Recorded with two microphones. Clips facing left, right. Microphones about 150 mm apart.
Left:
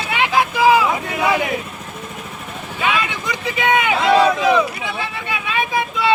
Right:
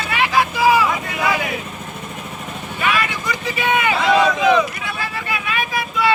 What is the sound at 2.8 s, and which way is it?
Vehicle, 20° left (ahead or behind).